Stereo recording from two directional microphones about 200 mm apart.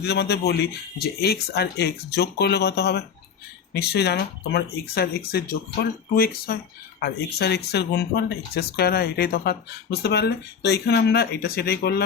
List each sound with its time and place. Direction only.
0.0 s speech: 55° left (ahead or behind)